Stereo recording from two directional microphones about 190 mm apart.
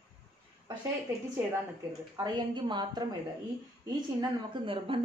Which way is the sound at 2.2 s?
25° right (ahead or behind).